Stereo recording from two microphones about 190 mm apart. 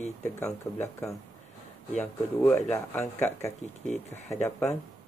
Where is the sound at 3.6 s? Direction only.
35° left (ahead or behind).